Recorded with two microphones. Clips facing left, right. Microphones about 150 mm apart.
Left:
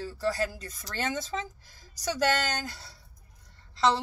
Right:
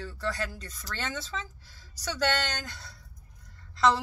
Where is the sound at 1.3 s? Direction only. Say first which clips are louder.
Left 4 dB; 45° left (ahead or behind).